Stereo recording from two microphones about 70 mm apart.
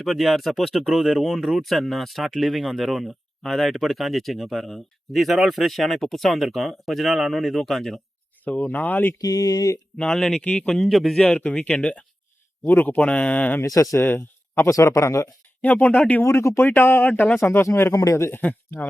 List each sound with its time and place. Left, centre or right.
0.0 s speech: centre
8.5 s speech: left
9.2 s speech: left
10.0 s speech: centre
10.4 s speech: centre
10.8 s speech: centre
11.2 s speech: centre
13.0 s speech: centre; by 14.7 s left
14.7 s speech: left
15.6 s speech: left
16.2 s speech: left
17.1 s speech: left
17.4 s speech: left